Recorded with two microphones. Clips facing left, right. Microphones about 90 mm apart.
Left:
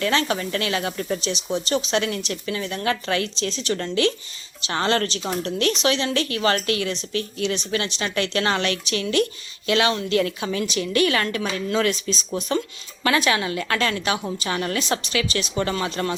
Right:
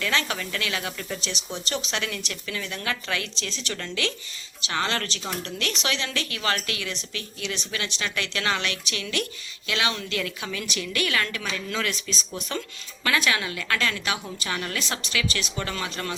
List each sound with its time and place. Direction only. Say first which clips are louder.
0.0 s speech: left 5 dB; 35° left (ahead or behind)
12.3 s a woman's voice: left 9 dB; 20° left (ahead or behind)